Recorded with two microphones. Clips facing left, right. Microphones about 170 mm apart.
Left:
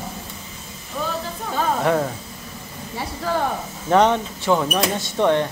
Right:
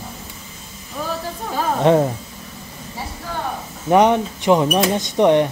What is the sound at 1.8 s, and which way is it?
Speech, 25° right (ahead or behind).